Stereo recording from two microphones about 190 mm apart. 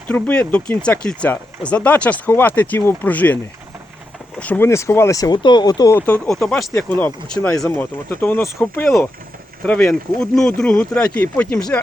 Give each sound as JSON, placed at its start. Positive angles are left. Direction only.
{"t": 0.1, "sound": "speech", "side_deg": 5}
{"t": 4.4, "sound": "speech", "side_deg": 10}
{"t": 6.2, "sound": "speech", "side_deg": 0}